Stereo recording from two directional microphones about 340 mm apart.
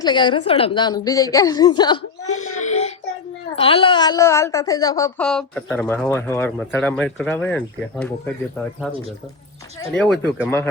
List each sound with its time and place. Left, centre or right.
0.0 s speech: centre
2.6 s child singing: centre
3.5 s speech: centre
9.9 s speech: centre